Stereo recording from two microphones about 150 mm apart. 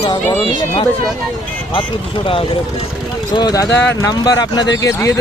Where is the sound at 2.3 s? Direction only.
35° left (ahead or behind).